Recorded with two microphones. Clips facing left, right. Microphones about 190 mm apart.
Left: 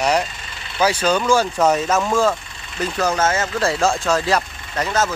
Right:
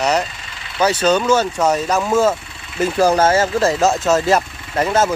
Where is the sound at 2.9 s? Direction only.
30° right (ahead or behind).